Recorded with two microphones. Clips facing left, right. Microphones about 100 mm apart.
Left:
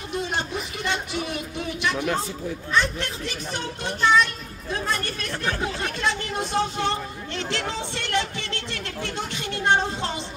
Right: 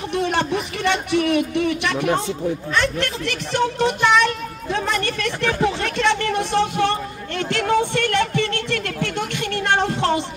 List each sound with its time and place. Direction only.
0.1 s speech: 65° right (ahead or behind)
2.7 s speech: 65° right (ahead or behind)
4.7 s a sound: 90° right; by 9.1 s 55° right (ahead or behind)
9.7 s music: 60° right (ahead or behind)